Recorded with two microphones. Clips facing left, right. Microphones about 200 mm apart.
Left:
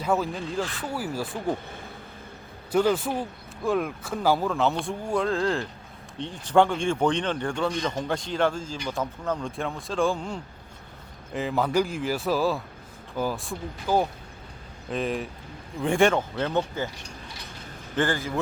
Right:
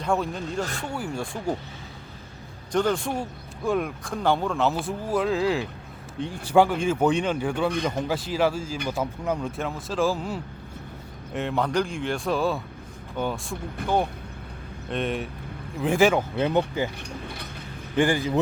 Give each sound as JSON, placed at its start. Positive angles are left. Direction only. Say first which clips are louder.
{"t": 0.0, "sound": "speech", "louder": "even", "side_deg": 5}
{"t": 2.7, "sound": "speech", "louder": "left 1 dB", "side_deg": 5}
{"t": 16.4, "sound": "speech", "louder": "right 3 dB", "side_deg": -15}
{"t": 17.0, "sound": "a sound", "louder": "right 6 dB", "side_deg": -55}
{"t": 17.9, "sound": "speech", "louder": "right 4 dB", "side_deg": -15}